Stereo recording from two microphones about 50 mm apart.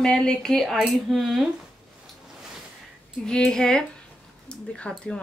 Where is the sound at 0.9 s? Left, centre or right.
Centre.